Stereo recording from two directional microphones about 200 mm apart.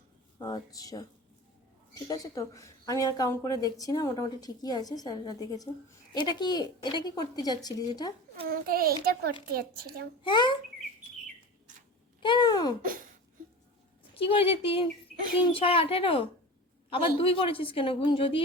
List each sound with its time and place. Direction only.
0.3 s a woman's voice: 20° left (ahead or behind)
2.0 s a woman's voice: 15° left (ahead or behind)
8.4 s a child's voice: 45° right (ahead or behind)
10.2 s a woman's voice: 25° left (ahead or behind)
12.2 s a woman's voice: 20° left (ahead or behind)
14.1 s a woman's voice: 30° left (ahead or behind)